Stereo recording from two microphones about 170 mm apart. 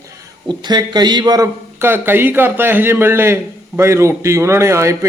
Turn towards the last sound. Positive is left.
turn(degrees=-15)  # may be behind; listen again after turning